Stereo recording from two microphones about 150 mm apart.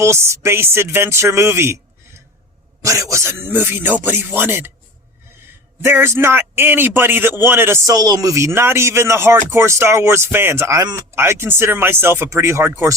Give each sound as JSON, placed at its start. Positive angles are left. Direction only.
{"t": 0.0, "sound": "a man's voice", "side_deg": -20}
{"t": 5.8, "sound": "a man's voice", "side_deg": -15}